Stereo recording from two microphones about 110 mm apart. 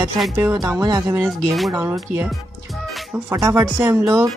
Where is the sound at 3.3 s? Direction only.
25° right (ahead or behind).